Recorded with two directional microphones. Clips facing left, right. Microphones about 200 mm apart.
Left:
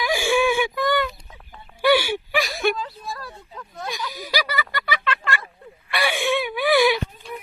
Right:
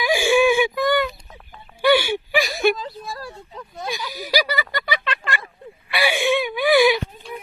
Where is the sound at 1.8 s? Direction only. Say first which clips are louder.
Right 1 dB; 5° left (ahead or behind).